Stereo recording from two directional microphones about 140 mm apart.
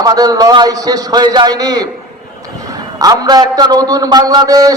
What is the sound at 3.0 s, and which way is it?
A man's voice, 25° right (ahead or behind).